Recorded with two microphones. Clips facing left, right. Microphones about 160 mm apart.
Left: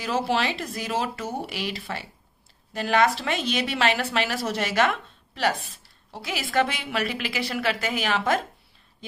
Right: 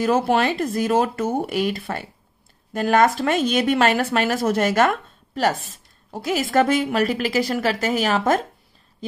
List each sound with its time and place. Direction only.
0.0 s speech: 50° right (ahead or behind)